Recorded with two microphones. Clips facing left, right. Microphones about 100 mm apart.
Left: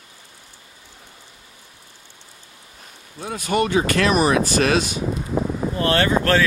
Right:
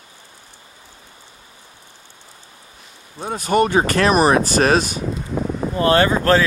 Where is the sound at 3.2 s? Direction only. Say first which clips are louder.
Right 4 dB; 35° right (ahead or behind).